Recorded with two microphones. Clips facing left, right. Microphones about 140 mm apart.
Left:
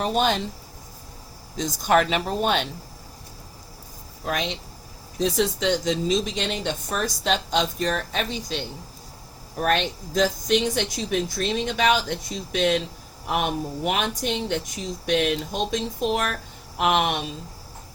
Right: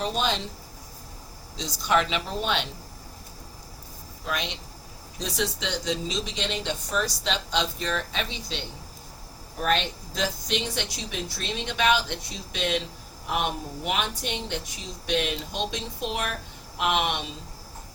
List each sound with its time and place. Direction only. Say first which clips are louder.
0.0 s a woman's voice: left 5 dB; 50° left (ahead or behind)
1.5 s a woman's voice: left 4 dB; 50° left (ahead or behind)
4.3 s a woman's voice: left 4 dB; 50° left (ahead or behind)